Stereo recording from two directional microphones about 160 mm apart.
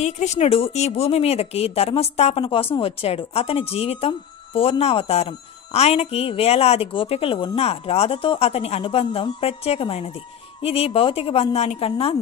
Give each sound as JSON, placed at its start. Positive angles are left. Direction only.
{"t": 0.0, "sound": "speech", "side_deg": 45}